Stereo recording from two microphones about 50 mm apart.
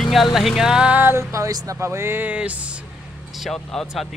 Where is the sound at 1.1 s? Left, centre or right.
Right.